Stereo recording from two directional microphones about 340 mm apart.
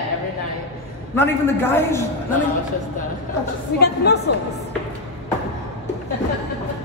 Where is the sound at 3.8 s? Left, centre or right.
Left.